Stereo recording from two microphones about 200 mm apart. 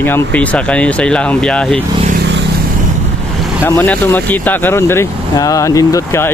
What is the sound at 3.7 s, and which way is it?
Speech, 10° left (ahead or behind).